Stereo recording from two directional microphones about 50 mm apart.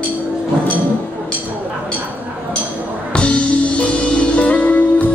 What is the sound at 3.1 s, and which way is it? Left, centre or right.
Music, left.